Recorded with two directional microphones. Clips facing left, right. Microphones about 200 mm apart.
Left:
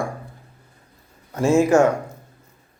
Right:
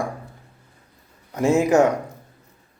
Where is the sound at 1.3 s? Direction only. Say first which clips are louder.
Left 1 dB; 20° right (ahead or behind).